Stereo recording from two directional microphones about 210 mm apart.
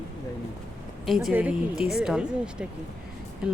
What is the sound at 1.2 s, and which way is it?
A woman's voice, 5° right (ahead or behind).